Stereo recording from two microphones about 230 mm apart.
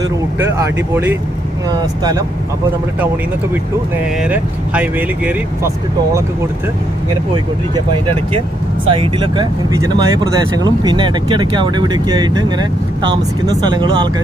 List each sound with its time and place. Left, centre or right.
1.6 s speech: centre
4.2 s speech: centre
8.9 s speech: right